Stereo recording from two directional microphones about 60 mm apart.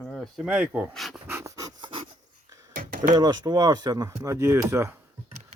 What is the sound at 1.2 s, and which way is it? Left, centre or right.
Pant, right.